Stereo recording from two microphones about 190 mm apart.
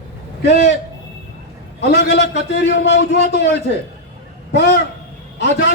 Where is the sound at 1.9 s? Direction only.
65° left (ahead or behind).